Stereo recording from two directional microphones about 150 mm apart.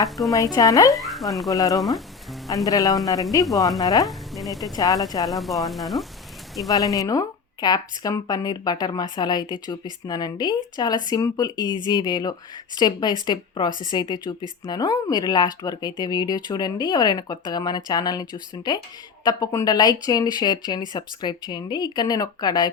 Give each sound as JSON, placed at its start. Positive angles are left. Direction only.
{"t": 0.3, "sound": "speech", "side_deg": 25}
{"t": 0.9, "sound": "speech", "side_deg": 0}
{"t": 1.5, "sound": "speech", "side_deg": 25}
{"t": 4.4, "sound": "speech", "side_deg": 0}
{"t": 4.8, "sound": "speech", "side_deg": 25}
{"t": 5.3, "sound": "frying", "side_deg": 0}
{"t": 6.7, "sound": "speech", "side_deg": 25}